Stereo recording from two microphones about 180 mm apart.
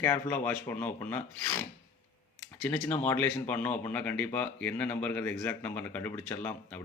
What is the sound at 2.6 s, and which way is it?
Speech, 10° left (ahead or behind).